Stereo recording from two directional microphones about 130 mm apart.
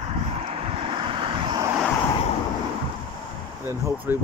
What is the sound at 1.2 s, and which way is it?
Vehicle, 40° right (ahead or behind).